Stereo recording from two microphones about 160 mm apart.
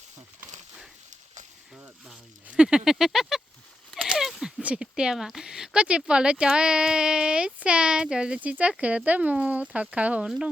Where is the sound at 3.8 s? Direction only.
Centre (ahead or behind).